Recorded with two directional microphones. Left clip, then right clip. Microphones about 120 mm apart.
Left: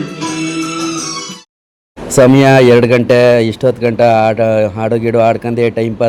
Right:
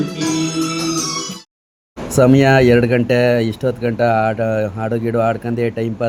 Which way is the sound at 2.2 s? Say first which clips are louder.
Left 5 dB; 35° left (ahead or behind).